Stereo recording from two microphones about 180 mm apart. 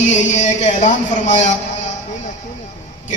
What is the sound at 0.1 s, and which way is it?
Music, 40° left (ahead or behind).